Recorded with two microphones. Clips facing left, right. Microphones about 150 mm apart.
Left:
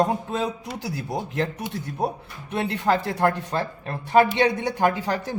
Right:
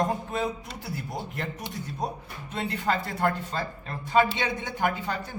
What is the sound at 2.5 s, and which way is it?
Speech, 70° left (ahead or behind).